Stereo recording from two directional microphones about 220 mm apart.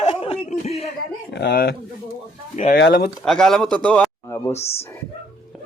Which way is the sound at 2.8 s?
45° left (ahead or behind).